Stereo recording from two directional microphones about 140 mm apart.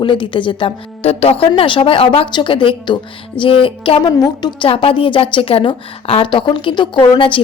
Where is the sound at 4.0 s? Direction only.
30° left (ahead or behind).